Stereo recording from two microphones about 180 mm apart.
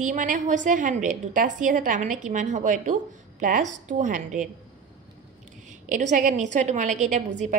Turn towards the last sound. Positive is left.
turn(degrees=-45)  # may be behind; listen again after turning